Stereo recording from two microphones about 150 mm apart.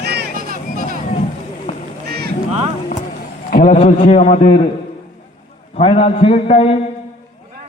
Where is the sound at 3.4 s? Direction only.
60° left (ahead or behind).